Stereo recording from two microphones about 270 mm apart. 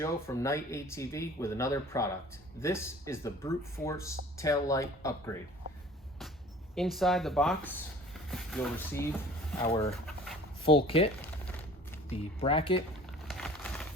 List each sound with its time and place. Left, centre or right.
0.0 s speech: centre
6.7 s speech: centre
10.6 s speech: centre
11.2 s a sound: centre
12.1 s speech: centre
13.1 s a sound: centre